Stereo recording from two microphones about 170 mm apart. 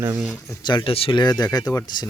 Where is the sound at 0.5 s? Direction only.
25° left (ahead or behind).